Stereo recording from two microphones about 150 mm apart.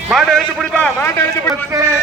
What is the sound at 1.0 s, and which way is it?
Speech, 15° left (ahead or behind).